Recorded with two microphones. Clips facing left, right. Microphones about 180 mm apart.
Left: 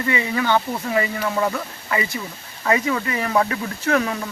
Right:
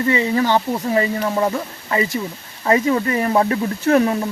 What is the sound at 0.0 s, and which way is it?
Speech, 30° right (ahead or behind).